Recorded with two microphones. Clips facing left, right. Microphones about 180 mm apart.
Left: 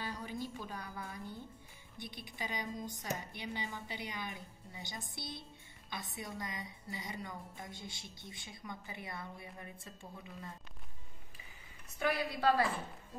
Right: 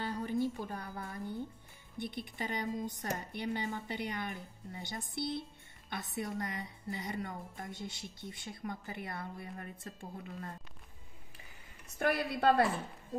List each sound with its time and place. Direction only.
0.0 s music: 55° right (ahead or behind)
2.0 s a woman's voice: 55° right (ahead or behind)
12.0 s a woman's voice: 55° right (ahead or behind)